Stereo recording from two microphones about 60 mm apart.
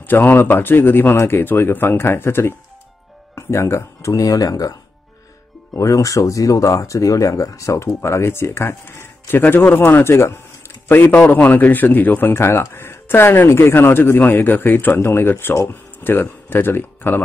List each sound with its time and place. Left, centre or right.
0.0 s speech: left
5.7 s speech: left
8.8 s a man's voice: left
15.5 s speech: left
16.0 s speech: left